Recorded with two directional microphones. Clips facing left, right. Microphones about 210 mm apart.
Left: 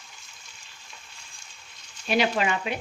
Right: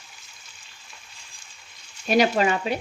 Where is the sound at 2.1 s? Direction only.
40° right (ahead or behind).